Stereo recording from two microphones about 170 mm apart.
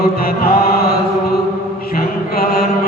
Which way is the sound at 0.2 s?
60° left (ahead or behind).